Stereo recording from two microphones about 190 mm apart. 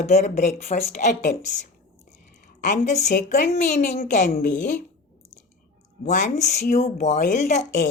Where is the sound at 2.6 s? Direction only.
40° left (ahead or behind).